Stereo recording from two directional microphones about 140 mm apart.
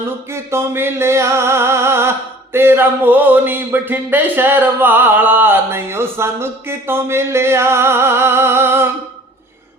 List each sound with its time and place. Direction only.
0.3 s music: 20° right (ahead or behind)